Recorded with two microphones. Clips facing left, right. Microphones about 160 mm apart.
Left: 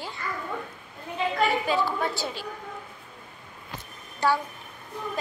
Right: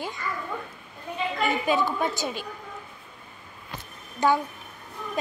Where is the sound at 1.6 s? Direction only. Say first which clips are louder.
Right 1 dB; 20° right (ahead or behind).